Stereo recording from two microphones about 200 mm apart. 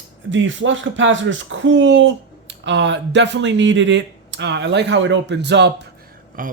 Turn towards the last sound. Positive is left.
turn(degrees=-45)  # may be behind; listen again after turning